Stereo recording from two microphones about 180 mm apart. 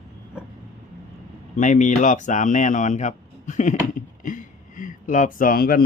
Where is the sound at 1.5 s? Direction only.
45° left (ahead or behind).